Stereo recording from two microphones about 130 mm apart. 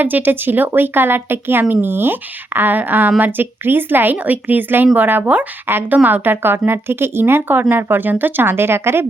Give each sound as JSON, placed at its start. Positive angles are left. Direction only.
{"t": 0.0, "sound": "a woman's voice", "side_deg": -15}